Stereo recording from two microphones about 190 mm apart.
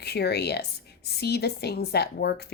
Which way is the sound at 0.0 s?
60° left (ahead or behind).